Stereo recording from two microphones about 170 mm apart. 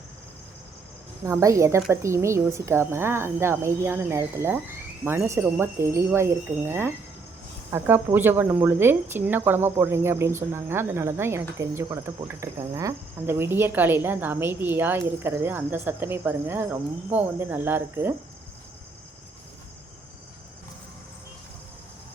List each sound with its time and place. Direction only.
1.2 s speech: 20° right (ahead or behind)